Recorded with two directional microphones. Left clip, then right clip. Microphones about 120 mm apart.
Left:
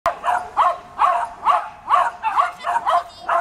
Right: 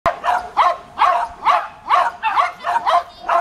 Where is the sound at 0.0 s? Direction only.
35° right (ahead or behind).